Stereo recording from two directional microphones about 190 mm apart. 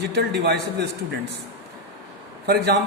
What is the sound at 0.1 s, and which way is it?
Speech, 60° right (ahead or behind).